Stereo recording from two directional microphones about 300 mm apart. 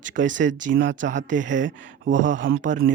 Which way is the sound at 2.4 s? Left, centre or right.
Right.